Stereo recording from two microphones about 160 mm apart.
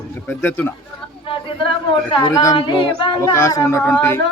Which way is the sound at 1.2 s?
35° left (ahead or behind).